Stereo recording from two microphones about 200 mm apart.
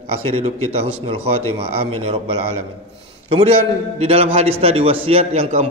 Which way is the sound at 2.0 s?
30° right (ahead or behind).